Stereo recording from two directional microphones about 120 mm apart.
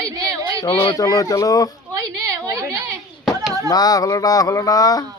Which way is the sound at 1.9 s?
25° right (ahead or behind).